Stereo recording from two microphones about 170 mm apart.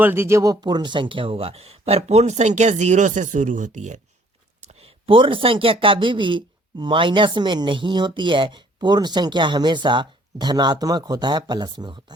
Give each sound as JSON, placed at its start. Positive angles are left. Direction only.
{"t": 0.0, "sound": "speech", "side_deg": -15}
{"t": 4.7, "sound": "speech", "side_deg": -30}